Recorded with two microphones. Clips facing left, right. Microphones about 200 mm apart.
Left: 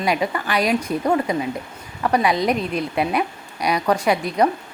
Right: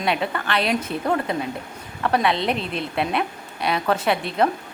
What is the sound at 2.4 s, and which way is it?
Speech, 40° left (ahead or behind).